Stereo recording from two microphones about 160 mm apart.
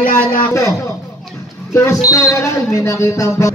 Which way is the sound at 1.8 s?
20° left (ahead or behind).